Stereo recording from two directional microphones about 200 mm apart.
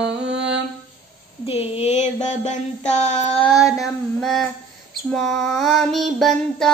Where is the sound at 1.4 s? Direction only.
30° left (ahead or behind).